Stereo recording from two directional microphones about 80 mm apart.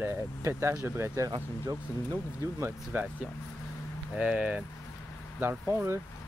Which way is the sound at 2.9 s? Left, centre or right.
Right.